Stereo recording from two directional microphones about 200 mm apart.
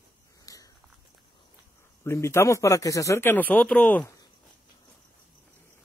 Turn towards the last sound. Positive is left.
turn(degrees=5)  # may be behind; listen again after turning